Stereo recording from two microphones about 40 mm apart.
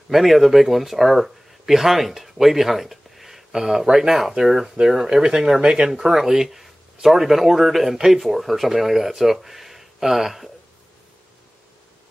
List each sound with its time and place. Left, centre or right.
0.1 s speech: centre